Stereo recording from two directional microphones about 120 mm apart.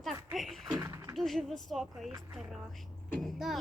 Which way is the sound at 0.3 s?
Centre (ahead or behind).